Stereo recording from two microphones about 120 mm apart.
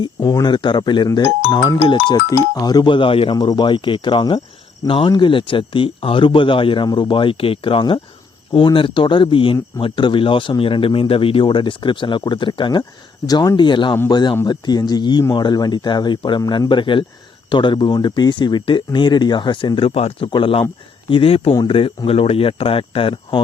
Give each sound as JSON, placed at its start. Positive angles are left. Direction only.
{"t": 0.0, "sound": "speech", "side_deg": 35}